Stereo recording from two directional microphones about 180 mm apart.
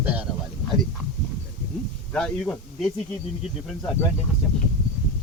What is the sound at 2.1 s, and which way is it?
Speech, 5° left (ahead or behind).